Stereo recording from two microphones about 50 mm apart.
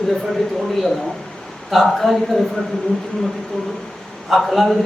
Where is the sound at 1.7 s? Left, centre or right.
Centre.